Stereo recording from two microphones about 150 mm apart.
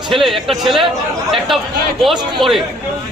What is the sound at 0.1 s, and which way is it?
Speech, centre (ahead or behind).